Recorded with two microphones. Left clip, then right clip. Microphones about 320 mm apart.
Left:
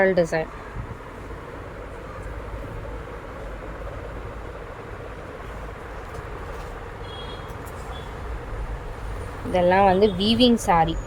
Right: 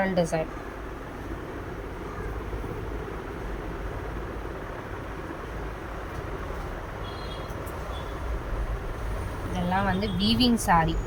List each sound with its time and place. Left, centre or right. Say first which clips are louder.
0.0 s speech: left 6 dB; centre
9.6 s speech: left 11 dB; centre